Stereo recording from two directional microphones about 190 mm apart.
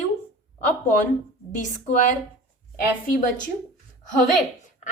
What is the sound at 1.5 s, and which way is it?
Speech, 40° left (ahead or behind).